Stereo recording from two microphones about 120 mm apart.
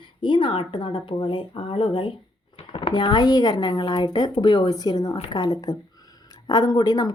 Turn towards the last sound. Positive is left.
turn(degrees=35)  # may be behind; listen again after turning